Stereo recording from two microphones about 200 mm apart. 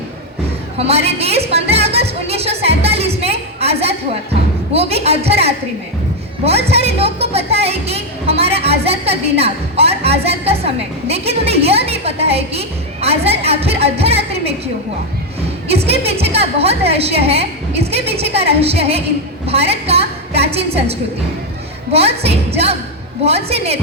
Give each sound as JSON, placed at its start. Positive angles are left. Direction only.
{"t": 0.8, "sound": "music", "side_deg": -30}
{"t": 4.7, "sound": "a woman's voice", "side_deg": -30}
{"t": 6.7, "sound": "a woman's voice", "side_deg": -30}
{"t": 15.7, "sound": "a woman's voice", "side_deg": -30}
{"t": 21.9, "sound": "a woman's voice", "side_deg": -30}